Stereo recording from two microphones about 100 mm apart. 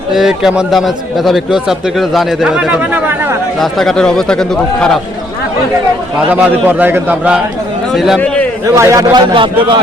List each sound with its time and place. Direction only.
0.1 s a man's voice: 5° right (ahead or behind)
2.6 s speech: 10° right (ahead or behind)
3.6 s a man's voice: 5° left (ahead or behind)
6.3 s a man's voice: 20° right (ahead or behind)
8.6 s speech: 30° right (ahead or behind)
9.1 s a man's voice: 55° right (ahead or behind)